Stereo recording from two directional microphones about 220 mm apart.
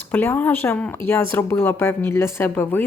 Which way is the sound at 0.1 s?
10° left (ahead or behind).